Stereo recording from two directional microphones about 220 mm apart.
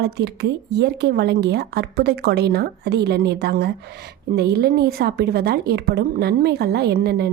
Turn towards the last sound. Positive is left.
turn(degrees=-45)  # may be behind; listen again after turning